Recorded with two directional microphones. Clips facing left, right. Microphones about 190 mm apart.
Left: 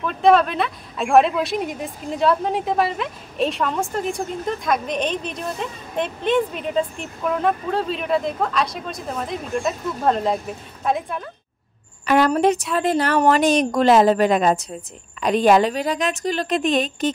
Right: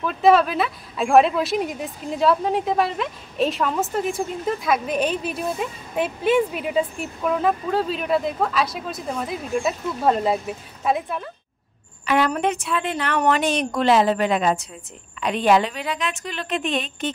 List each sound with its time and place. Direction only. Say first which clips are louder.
0.0 s speech: left 1 dB; 5° right (ahead or behind)
12.1 s speech: left 4 dB; 40° left (ahead or behind)